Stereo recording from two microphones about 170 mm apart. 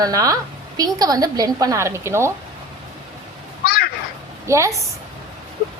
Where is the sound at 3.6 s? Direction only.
65° left (ahead or behind).